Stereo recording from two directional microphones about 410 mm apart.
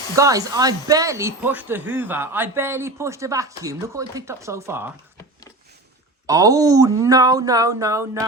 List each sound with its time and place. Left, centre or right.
0.2 s speech: centre
6.2 s speech: centre